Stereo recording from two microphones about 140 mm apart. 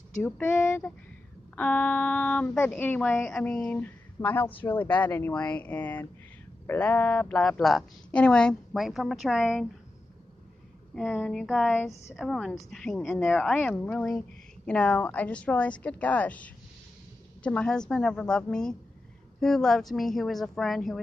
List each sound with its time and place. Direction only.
0.2 s a woman's voice: 10° left (ahead or behind)
11.0 s speech: 10° left (ahead or behind)
11.4 s a woman's voice: centre (ahead or behind)